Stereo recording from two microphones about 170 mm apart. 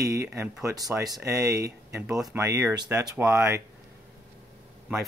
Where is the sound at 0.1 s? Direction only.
15° right (ahead or behind).